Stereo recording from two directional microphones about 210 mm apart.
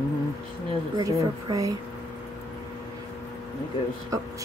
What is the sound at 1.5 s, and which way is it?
Speech, 15° right (ahead or behind).